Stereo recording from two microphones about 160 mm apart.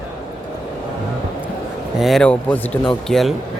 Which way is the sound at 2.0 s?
Centre (ahead or behind).